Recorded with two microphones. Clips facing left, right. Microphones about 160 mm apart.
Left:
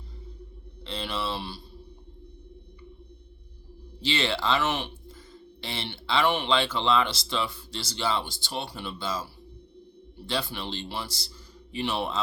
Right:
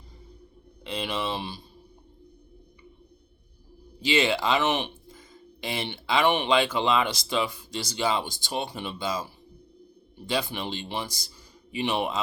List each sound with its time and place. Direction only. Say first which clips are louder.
0.9 s speech: right 2 dB; 15° right (ahead or behind)
4.0 s speech: right 4 dB; 15° right (ahead or behind)